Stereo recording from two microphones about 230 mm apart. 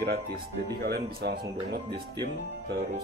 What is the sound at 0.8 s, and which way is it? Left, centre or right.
Speech, right.